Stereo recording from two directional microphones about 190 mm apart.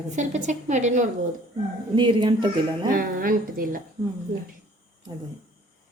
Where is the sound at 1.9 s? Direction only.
25° right (ahead or behind).